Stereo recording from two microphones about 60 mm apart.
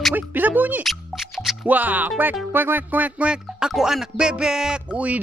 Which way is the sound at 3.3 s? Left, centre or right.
Centre.